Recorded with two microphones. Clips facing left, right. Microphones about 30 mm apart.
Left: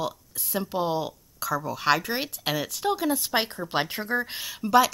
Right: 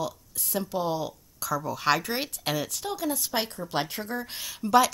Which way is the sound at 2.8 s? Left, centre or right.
Left.